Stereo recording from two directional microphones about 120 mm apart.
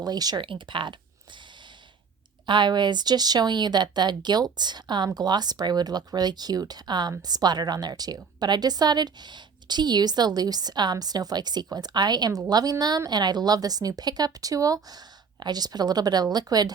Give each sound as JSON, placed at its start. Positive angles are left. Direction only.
{"t": 0.0, "sound": "a woman's voice", "side_deg": -35}
{"t": 0.4, "sound": "speech", "side_deg": -45}
{"t": 2.5, "sound": "a woman's voice", "side_deg": -40}